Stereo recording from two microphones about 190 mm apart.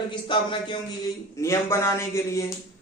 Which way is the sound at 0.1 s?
25° left (ahead or behind).